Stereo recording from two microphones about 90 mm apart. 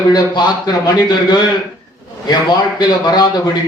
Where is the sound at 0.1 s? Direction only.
50° left (ahead or behind).